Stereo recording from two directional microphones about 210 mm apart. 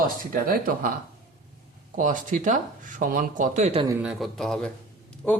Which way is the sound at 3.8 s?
15° right (ahead or behind).